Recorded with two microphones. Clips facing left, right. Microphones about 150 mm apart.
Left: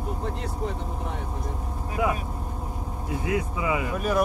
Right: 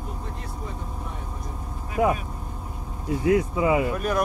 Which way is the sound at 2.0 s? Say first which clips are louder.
Right 4 dB; 35° right (ahead or behind).